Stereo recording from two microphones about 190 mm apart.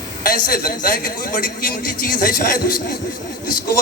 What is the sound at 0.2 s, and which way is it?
A man's voice, 50° left (ahead or behind).